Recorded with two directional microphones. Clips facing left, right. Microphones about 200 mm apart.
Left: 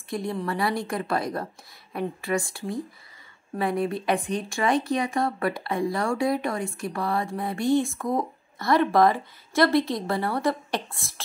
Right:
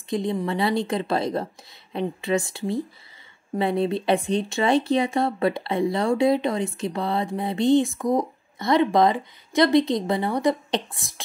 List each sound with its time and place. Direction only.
0.1 s speech: 20° right (ahead or behind)